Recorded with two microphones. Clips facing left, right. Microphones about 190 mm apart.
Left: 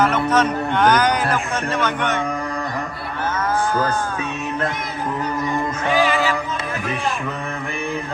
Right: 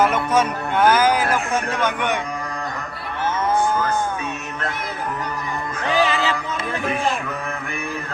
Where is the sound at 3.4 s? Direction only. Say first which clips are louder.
Right 2 dB; 30° right (ahead or behind).